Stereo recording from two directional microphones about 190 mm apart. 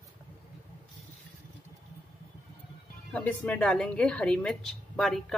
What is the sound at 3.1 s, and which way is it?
A woman's voice, 5° left (ahead or behind).